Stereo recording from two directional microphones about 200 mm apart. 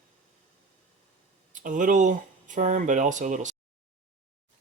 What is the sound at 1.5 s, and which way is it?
Speech, 40° right (ahead or behind).